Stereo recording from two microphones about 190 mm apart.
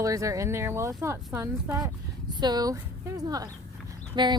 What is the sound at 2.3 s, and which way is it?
Speech, 20° right (ahead or behind).